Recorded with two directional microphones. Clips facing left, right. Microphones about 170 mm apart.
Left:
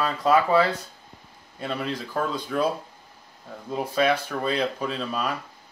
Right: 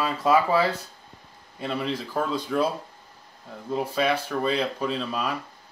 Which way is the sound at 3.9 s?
5° right (ahead or behind).